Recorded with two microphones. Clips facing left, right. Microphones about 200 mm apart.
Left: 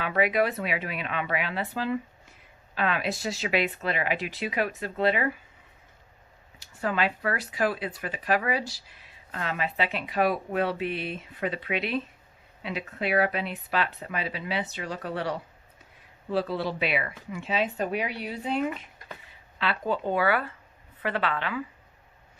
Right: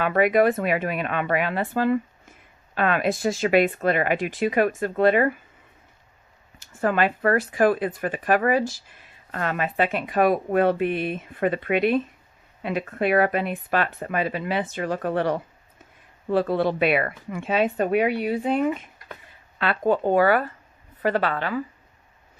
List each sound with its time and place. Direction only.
0.0 s speech: 50° right (ahead or behind)
6.6 s a woman's voice: 50° right (ahead or behind)